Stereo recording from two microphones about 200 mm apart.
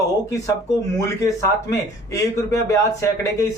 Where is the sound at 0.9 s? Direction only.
15° left (ahead or behind).